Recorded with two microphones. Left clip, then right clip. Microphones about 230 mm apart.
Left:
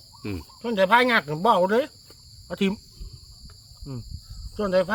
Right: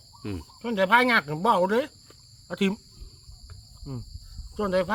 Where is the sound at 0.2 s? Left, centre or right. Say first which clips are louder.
Left 2 dB; centre.